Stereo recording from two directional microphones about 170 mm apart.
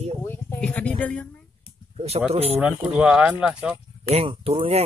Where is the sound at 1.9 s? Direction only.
35° right (ahead or behind).